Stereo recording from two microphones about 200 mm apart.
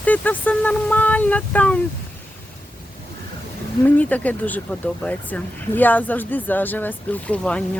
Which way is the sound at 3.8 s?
10° left (ahead or behind).